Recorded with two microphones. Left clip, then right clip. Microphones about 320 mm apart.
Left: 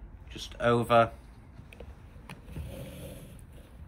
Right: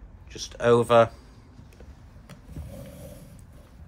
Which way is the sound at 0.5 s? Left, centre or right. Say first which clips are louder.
Right 5 dB; right.